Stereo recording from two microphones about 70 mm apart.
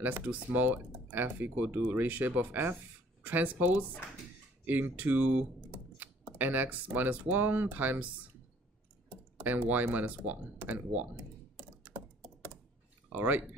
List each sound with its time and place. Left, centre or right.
0.0 s speech: right
9.4 s speech: right
11.5 s computer keyboard: right
13.1 s speech: right